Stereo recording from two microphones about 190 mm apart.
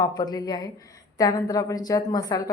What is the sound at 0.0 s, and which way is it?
A woman's voice, 20° left (ahead or behind).